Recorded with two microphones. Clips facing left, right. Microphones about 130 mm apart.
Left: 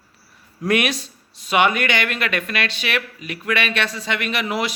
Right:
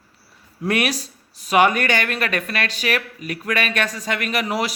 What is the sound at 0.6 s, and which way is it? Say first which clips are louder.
Speech: left 1 dB; 35° right (ahead or behind).